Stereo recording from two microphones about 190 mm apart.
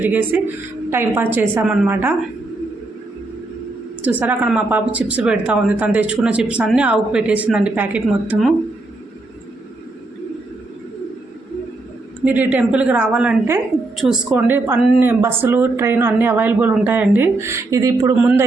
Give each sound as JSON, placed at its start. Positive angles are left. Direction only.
{"t": 0.0, "sound": "a woman's voice", "side_deg": -10}
{"t": 4.0, "sound": "a woman's voice", "side_deg": -10}
{"t": 12.2, "sound": "a woman's voice", "side_deg": -10}